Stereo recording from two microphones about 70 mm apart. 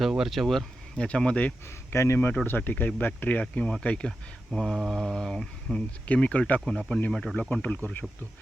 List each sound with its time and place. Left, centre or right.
0.3 s speech: centre
0.9 s speech: centre
1.9 s speech: left
2.5 s speech: left
4.5 s speech: centre
6.1 s speech: centre
7.5 s speech: left